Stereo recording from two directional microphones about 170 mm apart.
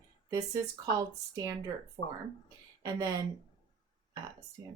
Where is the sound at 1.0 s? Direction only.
20° right (ahead or behind).